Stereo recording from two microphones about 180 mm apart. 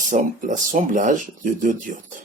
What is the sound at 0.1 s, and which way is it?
Speech, 45° right (ahead or behind).